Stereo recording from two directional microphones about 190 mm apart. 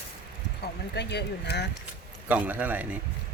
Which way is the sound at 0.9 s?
60° left (ahead or behind).